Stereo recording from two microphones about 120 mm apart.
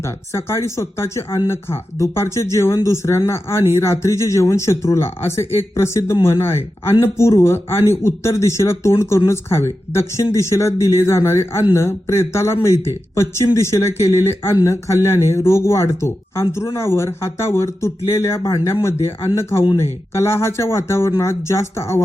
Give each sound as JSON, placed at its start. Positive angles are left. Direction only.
{"t": 0.0, "sound": "speech", "side_deg": 20}